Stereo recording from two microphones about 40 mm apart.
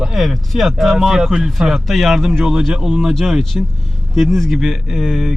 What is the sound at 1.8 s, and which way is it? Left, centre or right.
Speech, centre.